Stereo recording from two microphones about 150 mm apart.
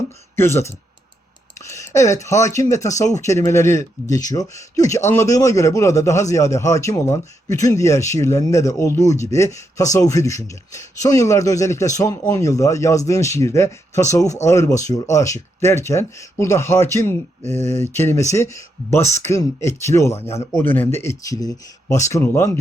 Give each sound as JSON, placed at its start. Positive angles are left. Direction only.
{"t": 0.3, "sound": "speech", "side_deg": 15}
{"t": 1.6, "sound": "speech", "side_deg": 20}